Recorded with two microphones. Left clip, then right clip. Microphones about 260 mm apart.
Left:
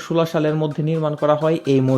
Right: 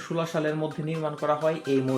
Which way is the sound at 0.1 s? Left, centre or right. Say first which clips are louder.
Left 9 dB; left.